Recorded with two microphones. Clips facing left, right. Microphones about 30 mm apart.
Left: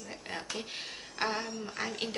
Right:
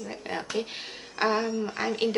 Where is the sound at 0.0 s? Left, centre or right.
Centre.